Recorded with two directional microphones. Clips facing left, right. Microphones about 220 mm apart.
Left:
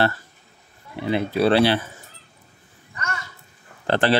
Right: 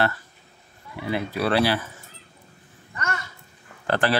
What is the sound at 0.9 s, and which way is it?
Speech, 25° left (ahead or behind).